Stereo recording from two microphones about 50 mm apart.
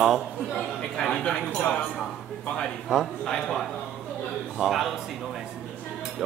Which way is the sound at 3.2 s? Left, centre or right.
Centre.